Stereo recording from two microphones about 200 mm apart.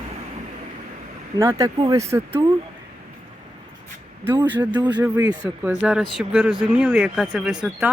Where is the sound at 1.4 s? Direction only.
15° right (ahead or behind).